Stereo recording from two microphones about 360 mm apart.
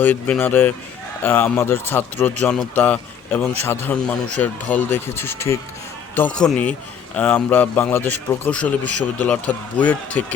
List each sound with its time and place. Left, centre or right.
0.0 s a man's voice: centre